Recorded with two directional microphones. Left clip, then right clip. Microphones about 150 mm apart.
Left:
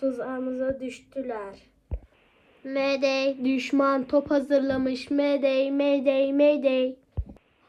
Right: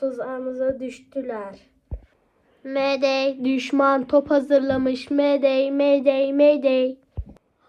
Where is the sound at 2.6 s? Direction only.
5° left (ahead or behind).